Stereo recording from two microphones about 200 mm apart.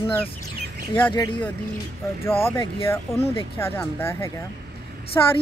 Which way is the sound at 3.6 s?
10° left (ahead or behind).